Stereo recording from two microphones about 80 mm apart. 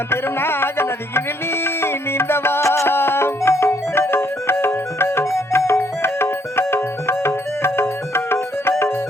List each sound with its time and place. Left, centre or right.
0.1 s music: left